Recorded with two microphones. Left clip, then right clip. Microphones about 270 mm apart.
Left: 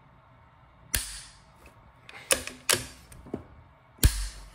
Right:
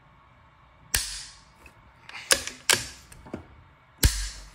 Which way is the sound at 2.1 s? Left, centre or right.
Centre.